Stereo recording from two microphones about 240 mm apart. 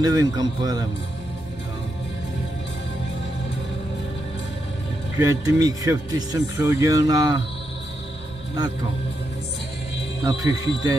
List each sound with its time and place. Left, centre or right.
0.0 s speech: centre
5.2 s speech: centre
10.2 s speech: centre